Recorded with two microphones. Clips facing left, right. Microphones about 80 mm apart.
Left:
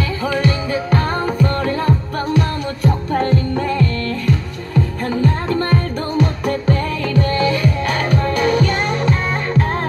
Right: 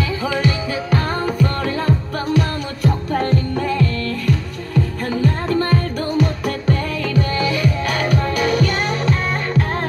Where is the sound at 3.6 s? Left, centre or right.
Centre.